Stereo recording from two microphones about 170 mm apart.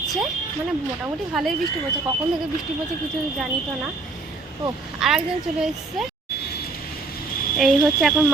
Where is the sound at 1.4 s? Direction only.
Centre (ahead or behind).